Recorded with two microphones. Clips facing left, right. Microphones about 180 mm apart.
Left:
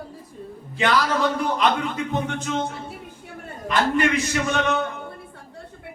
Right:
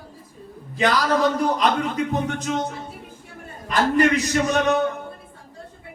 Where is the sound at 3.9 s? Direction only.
40° right (ahead or behind).